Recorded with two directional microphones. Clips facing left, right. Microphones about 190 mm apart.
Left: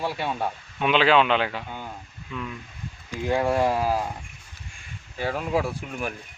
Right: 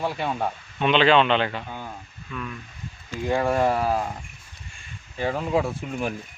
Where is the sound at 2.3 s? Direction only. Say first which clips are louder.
Even; 15° left (ahead or behind).